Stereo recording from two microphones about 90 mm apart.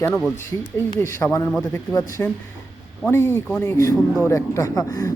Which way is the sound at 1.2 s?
25° left (ahead or behind).